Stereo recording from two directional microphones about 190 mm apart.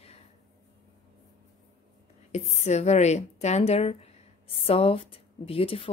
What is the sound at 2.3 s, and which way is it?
A woman's voice, 35° left (ahead or behind).